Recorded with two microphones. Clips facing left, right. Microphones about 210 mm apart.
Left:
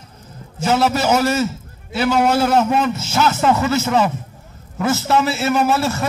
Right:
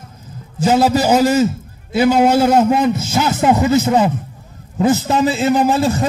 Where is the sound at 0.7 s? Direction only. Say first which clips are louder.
Right 3 dB; 15° right (ahead or behind).